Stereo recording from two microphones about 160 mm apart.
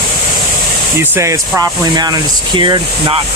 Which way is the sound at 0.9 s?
15° right (ahead or behind).